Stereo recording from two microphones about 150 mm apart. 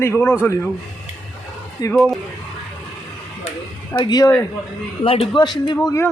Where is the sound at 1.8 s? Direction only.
25° left (ahead or behind).